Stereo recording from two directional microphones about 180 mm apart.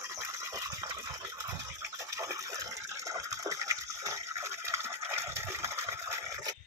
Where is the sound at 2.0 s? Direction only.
15° right (ahead or behind).